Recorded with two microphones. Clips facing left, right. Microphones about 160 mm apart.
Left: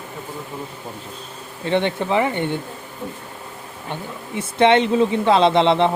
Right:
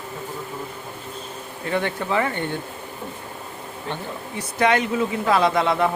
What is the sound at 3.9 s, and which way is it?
Speech, 20° left (ahead or behind).